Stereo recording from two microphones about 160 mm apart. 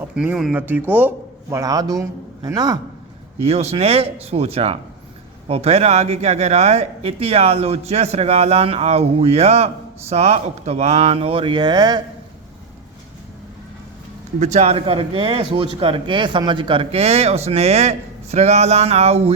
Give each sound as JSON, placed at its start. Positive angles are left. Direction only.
{"t": 0.2, "sound": "a man's voice", "side_deg": -5}
{"t": 3.4, "sound": "speech", "side_deg": -40}
{"t": 14.3, "sound": "speech", "side_deg": -45}